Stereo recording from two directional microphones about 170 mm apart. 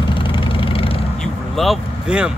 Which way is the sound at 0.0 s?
30° left (ahead or behind).